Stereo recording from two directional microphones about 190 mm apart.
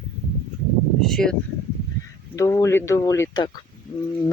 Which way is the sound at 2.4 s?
15° left (ahead or behind).